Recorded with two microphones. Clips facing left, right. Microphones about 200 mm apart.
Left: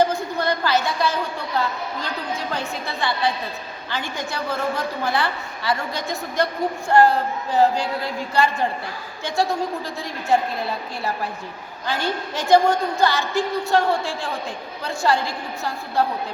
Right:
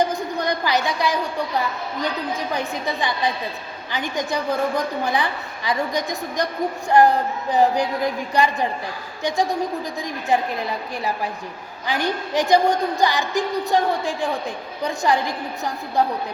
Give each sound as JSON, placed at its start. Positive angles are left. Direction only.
{"t": 0.0, "sound": "a woman's voice", "side_deg": -15}
{"t": 11.9, "sound": "a woman's voice", "side_deg": -15}